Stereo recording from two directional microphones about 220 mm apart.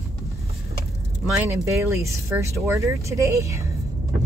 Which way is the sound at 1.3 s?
10° right (ahead or behind).